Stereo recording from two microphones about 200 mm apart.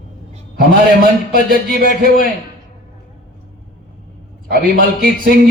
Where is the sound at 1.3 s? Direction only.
45° right (ahead or behind).